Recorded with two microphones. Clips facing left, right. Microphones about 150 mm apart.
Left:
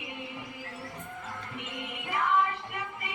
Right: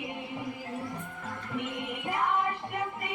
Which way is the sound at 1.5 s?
50° right (ahead or behind).